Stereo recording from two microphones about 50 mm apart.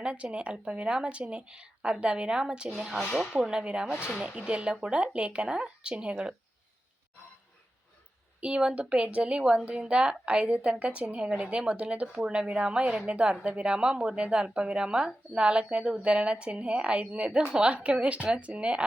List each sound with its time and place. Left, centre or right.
0.0 s speech: right
2.9 s speech: centre
3.5 s speech: centre
8.4 s speech: right